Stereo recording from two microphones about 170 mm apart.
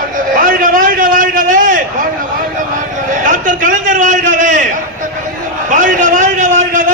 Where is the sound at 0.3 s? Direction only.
55° right (ahead or behind).